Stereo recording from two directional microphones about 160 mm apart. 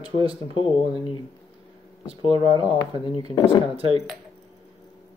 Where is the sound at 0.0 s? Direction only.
35° right (ahead or behind).